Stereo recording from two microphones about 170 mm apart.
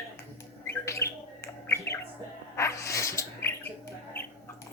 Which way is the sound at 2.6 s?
20° left (ahead or behind).